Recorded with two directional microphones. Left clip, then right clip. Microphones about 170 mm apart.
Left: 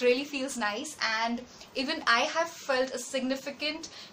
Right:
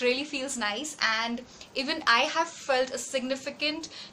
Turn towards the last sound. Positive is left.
turn(degrees=-5)  # may be behind; listen again after turning